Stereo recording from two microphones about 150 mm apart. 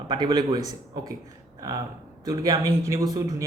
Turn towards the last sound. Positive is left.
turn(degrees=-20)  # may be behind; listen again after turning